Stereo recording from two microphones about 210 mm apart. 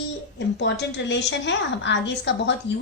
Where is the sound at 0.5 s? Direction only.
55° left (ahead or behind).